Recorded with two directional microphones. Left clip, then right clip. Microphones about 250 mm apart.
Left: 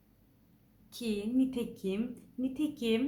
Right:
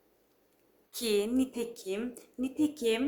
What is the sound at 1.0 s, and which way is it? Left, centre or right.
A woman's voice, right.